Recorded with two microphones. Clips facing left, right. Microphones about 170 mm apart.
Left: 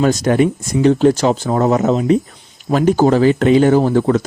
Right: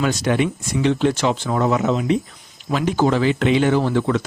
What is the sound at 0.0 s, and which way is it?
Speech, 45° left (ahead or behind).